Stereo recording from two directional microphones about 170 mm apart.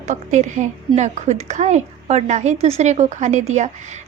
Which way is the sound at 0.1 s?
45° right (ahead or behind).